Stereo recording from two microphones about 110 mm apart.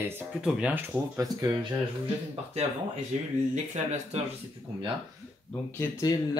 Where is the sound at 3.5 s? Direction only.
90° right.